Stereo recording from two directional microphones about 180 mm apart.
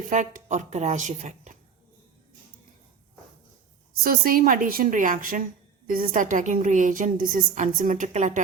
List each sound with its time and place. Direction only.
0.1 s a woman's voice: 45° right (ahead or behind)
4.0 s a woman's voice: 55° right (ahead or behind)